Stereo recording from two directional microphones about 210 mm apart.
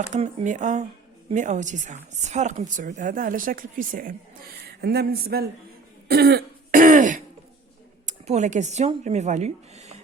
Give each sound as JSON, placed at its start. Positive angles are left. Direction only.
{"t": 0.1, "sound": "a woman's voice", "side_deg": -30}
{"t": 6.1, "sound": "throat clearing", "side_deg": -50}
{"t": 8.0, "sound": "speech", "side_deg": -35}